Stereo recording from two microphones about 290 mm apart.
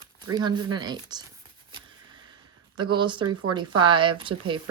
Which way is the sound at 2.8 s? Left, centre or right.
Centre.